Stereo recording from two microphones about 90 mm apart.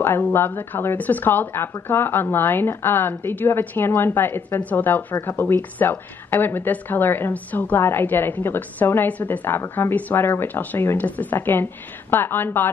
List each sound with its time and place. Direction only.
0.0 s speech: 25° left (ahead or behind)